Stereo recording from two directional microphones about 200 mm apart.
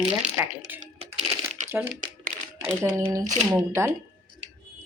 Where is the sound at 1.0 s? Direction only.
35° right (ahead or behind).